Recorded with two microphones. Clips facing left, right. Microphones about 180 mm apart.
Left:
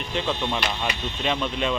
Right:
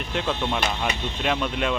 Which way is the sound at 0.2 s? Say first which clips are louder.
Right 1 dB; 5° right (ahead or behind).